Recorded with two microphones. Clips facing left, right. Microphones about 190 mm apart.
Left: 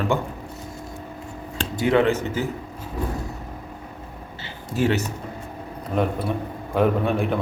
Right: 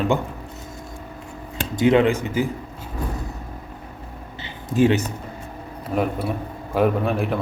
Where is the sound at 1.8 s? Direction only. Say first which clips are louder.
Right 2 dB; 20° right (ahead or behind).